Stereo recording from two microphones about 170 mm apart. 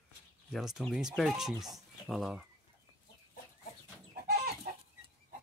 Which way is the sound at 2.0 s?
Centre (ahead or behind).